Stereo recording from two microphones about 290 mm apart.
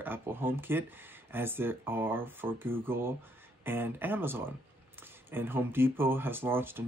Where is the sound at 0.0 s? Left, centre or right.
Centre.